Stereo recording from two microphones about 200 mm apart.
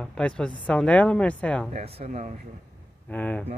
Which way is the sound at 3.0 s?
10° left (ahead or behind).